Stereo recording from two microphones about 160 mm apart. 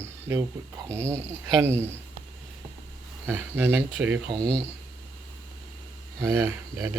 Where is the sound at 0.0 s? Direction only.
15° right (ahead or behind).